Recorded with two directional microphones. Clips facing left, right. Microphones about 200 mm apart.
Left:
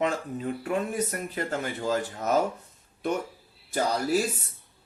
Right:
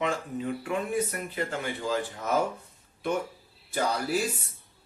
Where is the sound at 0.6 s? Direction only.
40° left (ahead or behind).